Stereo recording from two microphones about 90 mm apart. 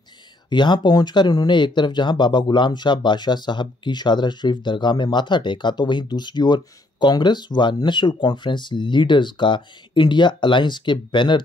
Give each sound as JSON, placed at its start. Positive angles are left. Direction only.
{"t": 0.5, "sound": "speech", "side_deg": 55}